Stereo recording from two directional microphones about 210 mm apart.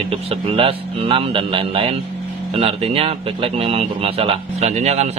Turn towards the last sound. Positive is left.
turn(degrees=-30)  # may be behind; listen again after turning